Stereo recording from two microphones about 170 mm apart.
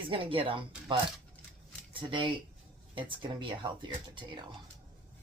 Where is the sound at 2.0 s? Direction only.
30° right (ahead or behind).